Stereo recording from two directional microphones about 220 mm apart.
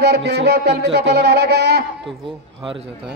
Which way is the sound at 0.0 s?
50° right (ahead or behind).